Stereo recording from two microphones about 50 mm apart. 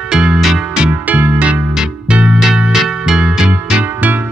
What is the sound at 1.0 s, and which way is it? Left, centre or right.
Music, right.